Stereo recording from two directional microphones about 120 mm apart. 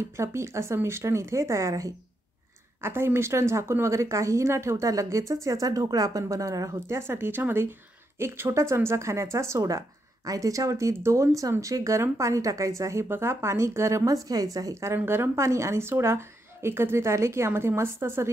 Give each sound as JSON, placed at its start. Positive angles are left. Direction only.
{"t": 0.0, "sound": "speech", "side_deg": -25}